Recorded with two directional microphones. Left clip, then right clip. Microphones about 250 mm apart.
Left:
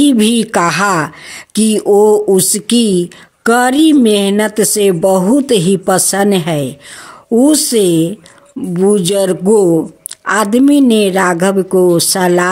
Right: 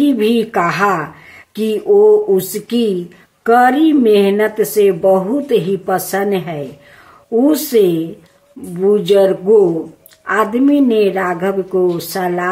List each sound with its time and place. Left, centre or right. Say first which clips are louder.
0.0 s a woman's voice: left 2 dB; left